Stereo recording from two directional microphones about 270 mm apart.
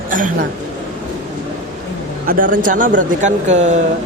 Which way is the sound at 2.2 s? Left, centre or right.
Right.